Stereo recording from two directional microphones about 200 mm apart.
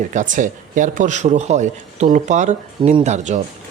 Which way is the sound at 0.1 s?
40° right (ahead or behind).